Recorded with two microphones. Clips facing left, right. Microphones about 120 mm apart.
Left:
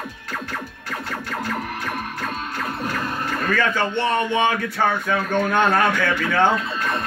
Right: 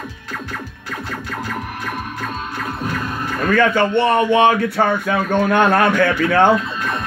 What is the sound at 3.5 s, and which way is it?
A man's voice, 60° right (ahead or behind).